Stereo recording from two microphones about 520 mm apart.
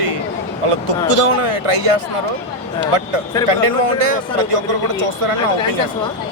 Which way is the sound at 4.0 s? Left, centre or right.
Right.